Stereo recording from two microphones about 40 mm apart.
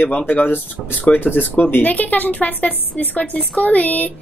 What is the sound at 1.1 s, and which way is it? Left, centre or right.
A woman's voice, left.